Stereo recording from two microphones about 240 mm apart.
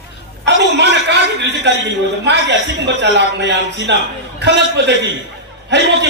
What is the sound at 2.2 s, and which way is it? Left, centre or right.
A man's voice, right.